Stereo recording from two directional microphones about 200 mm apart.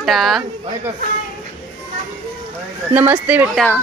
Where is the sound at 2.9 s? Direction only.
10° right (ahead or behind).